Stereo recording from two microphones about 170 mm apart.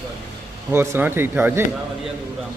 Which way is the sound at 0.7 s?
15° right (ahead or behind).